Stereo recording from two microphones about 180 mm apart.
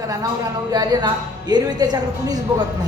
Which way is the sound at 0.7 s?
20° right (ahead or behind).